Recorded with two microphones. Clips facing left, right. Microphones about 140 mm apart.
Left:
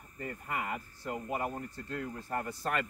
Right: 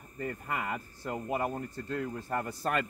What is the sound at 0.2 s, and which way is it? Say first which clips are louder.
Speech: right 2 dB; 35° right (ahead or behind).